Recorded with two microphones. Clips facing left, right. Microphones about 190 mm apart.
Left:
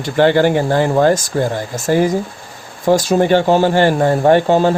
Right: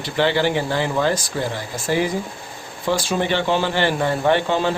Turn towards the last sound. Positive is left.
turn(degrees=45)  # may be behind; listen again after turning